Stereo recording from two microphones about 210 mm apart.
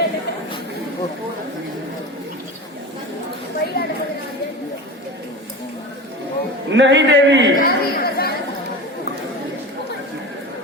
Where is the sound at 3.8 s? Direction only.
45° left (ahead or behind).